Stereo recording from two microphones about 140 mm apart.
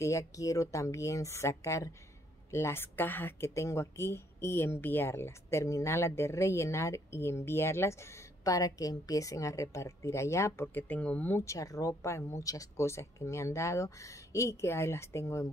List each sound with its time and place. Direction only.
0.0 s speech: 20° left (ahead or behind)